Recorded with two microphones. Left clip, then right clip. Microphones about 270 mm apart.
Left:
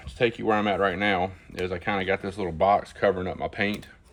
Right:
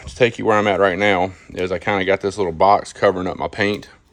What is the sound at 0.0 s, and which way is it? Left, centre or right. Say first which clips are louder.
Speech: right 8 dB; right.